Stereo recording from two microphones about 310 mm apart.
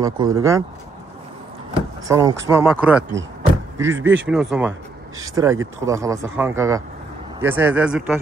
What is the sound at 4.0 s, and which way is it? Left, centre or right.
Speech, right.